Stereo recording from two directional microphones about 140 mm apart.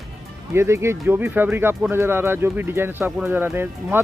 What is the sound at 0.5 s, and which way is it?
Speech, 20° right (ahead or behind).